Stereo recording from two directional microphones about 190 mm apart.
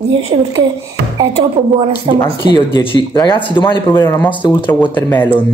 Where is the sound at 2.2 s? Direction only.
25° left (ahead or behind).